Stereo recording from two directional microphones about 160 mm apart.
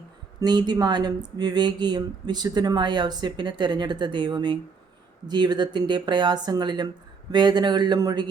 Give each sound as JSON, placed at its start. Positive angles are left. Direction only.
{"t": 0.3, "sound": "speech", "side_deg": -25}